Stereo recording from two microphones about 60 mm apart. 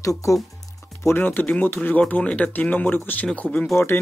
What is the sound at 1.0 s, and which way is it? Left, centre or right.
Speech, left.